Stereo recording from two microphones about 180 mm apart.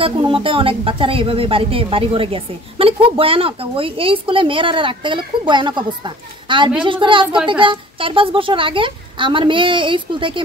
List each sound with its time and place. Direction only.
0.0 s a woman's voice: 30° right (ahead or behind)